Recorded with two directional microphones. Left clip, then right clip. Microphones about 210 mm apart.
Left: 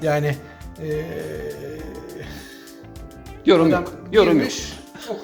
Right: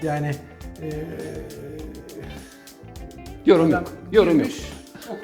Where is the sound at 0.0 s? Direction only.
50° left (ahead or behind).